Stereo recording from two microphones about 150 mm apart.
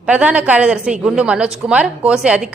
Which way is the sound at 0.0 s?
10° right (ahead or behind).